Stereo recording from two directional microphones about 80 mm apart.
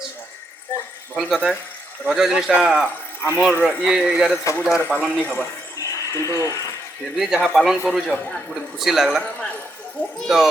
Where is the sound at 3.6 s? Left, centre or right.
Centre.